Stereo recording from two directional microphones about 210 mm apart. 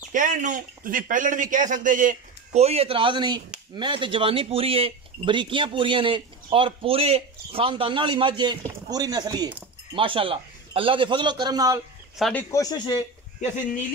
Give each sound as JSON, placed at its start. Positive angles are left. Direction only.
{"t": 0.1, "sound": "speech", "side_deg": -40}
{"t": 12.2, "sound": "speech", "side_deg": 5}